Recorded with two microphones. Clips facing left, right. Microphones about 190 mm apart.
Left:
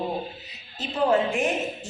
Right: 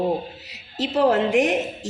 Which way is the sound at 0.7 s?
75° right (ahead or behind).